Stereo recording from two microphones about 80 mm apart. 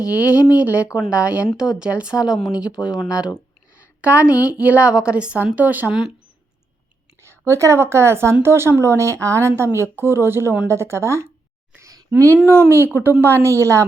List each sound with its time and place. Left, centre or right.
0.0 s a woman's voice: centre
3.8 s a sound: centre
4.4 s a woman's voice: centre
7.2 s speech: right
11.8 s a sound: right
12.5 s speech: right